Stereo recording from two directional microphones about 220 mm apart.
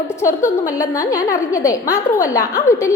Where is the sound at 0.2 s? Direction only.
15° left (ahead or behind).